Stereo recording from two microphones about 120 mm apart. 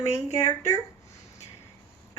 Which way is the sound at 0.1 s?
25° left (ahead or behind).